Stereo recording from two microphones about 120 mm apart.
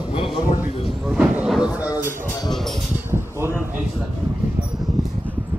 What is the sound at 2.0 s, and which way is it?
Speech, 20° right (ahead or behind).